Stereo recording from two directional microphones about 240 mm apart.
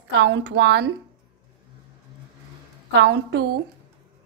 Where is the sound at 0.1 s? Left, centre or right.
Right.